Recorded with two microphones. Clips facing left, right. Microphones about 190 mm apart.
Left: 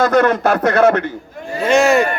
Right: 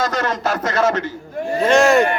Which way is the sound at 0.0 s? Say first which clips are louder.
Left 7 dB; 60° left (ahead or behind).